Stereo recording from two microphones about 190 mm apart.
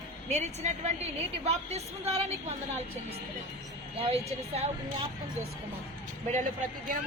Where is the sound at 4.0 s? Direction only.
30° right (ahead or behind).